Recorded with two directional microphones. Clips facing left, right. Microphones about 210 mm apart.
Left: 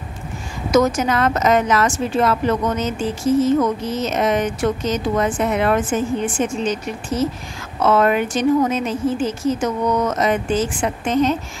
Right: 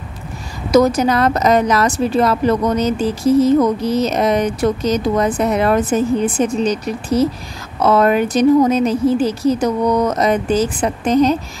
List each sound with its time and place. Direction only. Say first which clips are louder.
0.7 s a woman's voice: right 4 dB; 35° right (ahead or behind)